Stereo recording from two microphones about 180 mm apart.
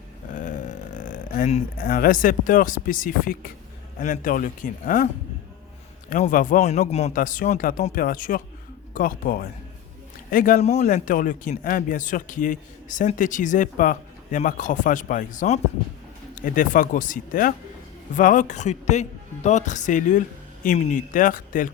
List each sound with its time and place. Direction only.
0.3 s a man's voice: 45° left (ahead or behind)
6.1 s a man's voice: 45° left (ahead or behind)